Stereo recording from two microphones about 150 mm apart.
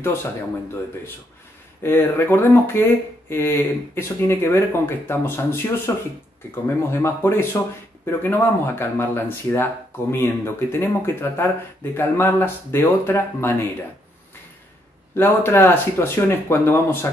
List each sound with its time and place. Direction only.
1.8 s speech: 15° left (ahead or behind)
15.1 s speech: 15° left (ahead or behind)